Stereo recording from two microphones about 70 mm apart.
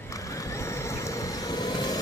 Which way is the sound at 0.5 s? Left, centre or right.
Left.